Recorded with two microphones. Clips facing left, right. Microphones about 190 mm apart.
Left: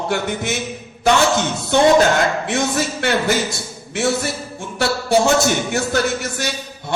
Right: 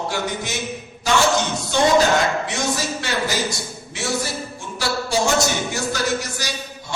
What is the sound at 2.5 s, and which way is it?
A man's voice, 60° left (ahead or behind).